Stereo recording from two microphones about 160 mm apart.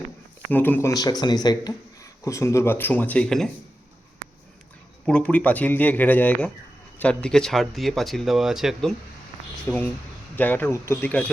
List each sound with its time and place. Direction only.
0.5 s speech: 10° left (ahead or behind)
5.0 s speech: 5° left (ahead or behind)
9.6 s speech: 10° left (ahead or behind)